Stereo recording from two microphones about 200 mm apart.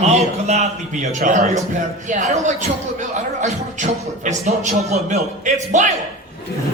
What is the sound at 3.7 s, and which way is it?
A man's voice, 35° right (ahead or behind).